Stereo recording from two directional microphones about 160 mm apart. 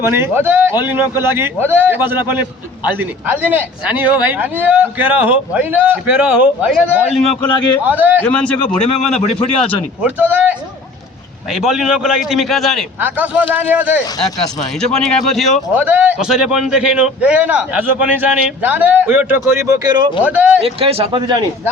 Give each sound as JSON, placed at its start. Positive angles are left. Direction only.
{"t": 0.0, "sound": "a man's voice", "side_deg": -15}
{"t": 8.2, "sound": "a man's voice", "side_deg": 5}
{"t": 10.0, "sound": "a man's voice", "side_deg": -10}
{"t": 11.5, "sound": "a man's voice", "side_deg": 0}
{"t": 13.0, "sound": "a man's voice", "side_deg": -10}
{"t": 14.2, "sound": "speech", "side_deg": 25}
{"t": 14.8, "sound": "a man's voice", "side_deg": 5}
{"t": 15.7, "sound": "a man's voice", "side_deg": -10}
{"t": 20.2, "sound": "a man's voice", "side_deg": -10}
{"t": 20.7, "sound": "speech", "side_deg": -35}